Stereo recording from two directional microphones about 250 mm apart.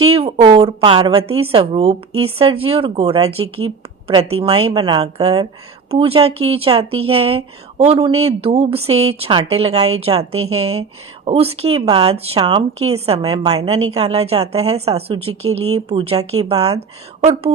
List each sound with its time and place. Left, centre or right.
0.0 s a woman's voice: right